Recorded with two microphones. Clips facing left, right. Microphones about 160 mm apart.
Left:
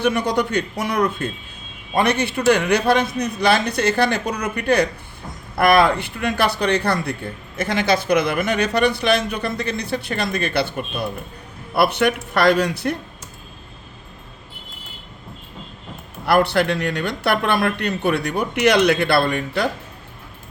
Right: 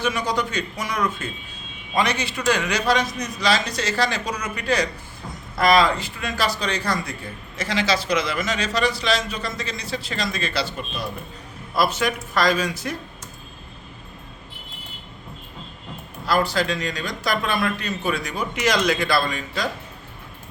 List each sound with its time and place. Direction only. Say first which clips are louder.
0.0 s speech: left 5 dB; 60° left (ahead or behind)
16.2 s speech: left 5 dB; 65° left (ahead or behind)